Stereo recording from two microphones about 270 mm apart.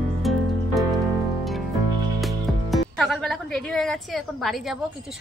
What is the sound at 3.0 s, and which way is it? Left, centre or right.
A woman's voice, centre.